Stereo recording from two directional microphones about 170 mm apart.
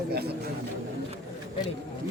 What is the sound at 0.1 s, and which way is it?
Speech, 70° right (ahead or behind).